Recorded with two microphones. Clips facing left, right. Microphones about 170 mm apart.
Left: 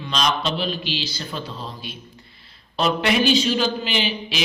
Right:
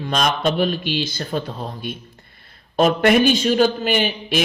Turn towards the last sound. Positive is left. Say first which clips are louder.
# right 5 dB
turn(degrees=-50)  # may be behind; listen again after turning